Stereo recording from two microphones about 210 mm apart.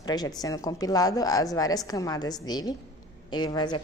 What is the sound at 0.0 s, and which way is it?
A woman's voice, 20° left (ahead or behind).